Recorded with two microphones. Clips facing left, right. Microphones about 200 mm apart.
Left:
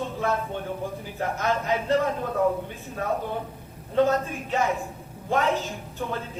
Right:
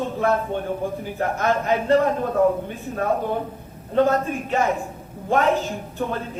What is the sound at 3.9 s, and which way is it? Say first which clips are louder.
Speech: right 3 dB; 60° right (ahead or behind).